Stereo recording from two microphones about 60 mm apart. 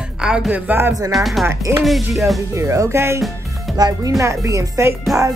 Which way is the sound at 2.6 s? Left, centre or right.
Right.